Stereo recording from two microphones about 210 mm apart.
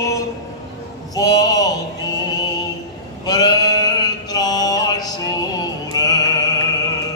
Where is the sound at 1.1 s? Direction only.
15° left (ahead or behind).